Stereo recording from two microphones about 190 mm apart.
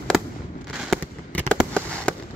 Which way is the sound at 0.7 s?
5° left (ahead or behind).